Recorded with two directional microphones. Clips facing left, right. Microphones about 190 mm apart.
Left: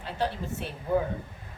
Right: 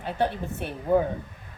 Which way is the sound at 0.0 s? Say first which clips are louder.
Right 4 dB; 55° right (ahead or behind).